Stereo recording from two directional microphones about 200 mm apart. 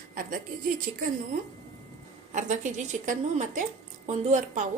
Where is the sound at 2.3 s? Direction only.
40° right (ahead or behind).